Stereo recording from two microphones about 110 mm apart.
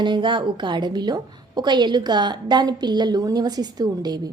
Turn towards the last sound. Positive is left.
turn(degrees=-35)  # may be behind; listen again after turning